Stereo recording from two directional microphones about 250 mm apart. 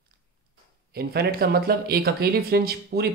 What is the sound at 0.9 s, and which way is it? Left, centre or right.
Speech, right.